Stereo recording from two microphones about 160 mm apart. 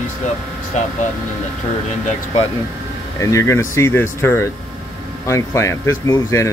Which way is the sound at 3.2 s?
20° left (ahead or behind).